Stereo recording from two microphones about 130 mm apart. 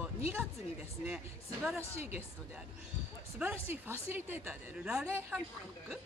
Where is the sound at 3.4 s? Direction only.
10° right (ahead or behind).